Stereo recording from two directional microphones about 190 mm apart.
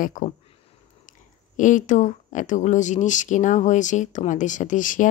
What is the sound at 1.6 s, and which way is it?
Speech, 40° left (ahead or behind).